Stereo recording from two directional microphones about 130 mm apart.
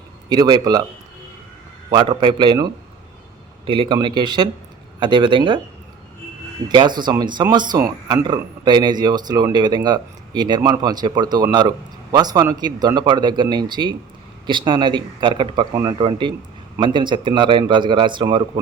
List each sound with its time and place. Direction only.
0.3 s speech: 35° right (ahead or behind)
1.9 s speech: 35° right (ahead or behind)
3.7 s speech: 40° right (ahead or behind)
6.7 s speech: 35° right (ahead or behind)
15.7 s speech: 20° right (ahead or behind)
16.0 s speech: 35° right (ahead or behind)